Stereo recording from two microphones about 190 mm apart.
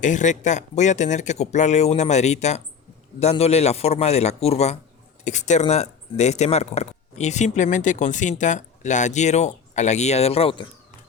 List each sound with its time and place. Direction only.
0.0 s speech: 40° left (ahead or behind)